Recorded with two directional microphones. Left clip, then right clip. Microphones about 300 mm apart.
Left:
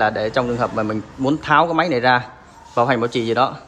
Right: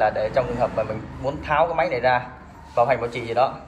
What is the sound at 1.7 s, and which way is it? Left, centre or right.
A man's voice, left.